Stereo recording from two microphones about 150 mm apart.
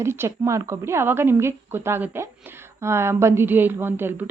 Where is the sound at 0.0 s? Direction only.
15° right (ahead or behind).